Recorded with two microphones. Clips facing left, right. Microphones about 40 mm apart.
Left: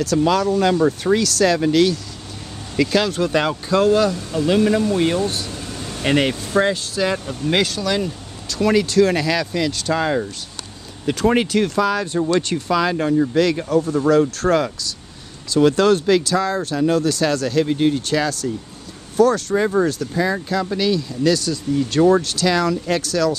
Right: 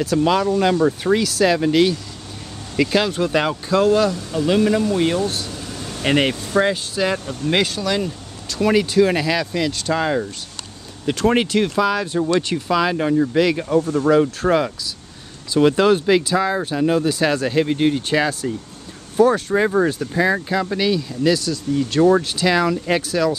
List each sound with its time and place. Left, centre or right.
0.0 s speech: centre
13.7 s speech: centre
14.0 s speech: centre
22.2 s speech: centre